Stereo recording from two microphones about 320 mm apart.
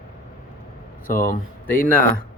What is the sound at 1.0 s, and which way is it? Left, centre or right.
Speech, left.